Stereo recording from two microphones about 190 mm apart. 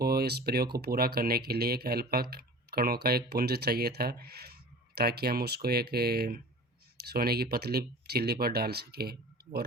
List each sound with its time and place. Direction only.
0.0 s speech: 55° right (ahead or behind)